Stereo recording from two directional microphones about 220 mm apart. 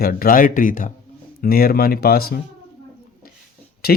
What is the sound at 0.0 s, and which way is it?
Speech, 40° left (ahead or behind).